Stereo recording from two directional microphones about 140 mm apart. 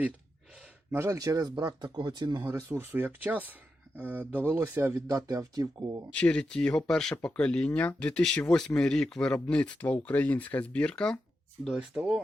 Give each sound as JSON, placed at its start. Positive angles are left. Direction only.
{"t": 0.9, "sound": "speech", "side_deg": -20}
{"t": 2.4, "sound": "speech", "side_deg": -20}
{"t": 6.1, "sound": "speech", "side_deg": 5}